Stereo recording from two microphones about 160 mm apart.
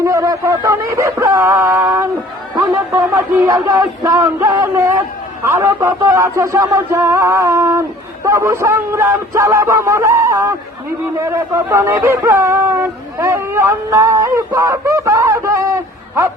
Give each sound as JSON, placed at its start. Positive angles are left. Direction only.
{"t": 0.0, "sound": "speech", "side_deg": -20}